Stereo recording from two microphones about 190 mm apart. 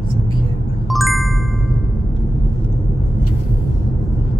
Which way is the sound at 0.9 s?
Centre (ahead or behind).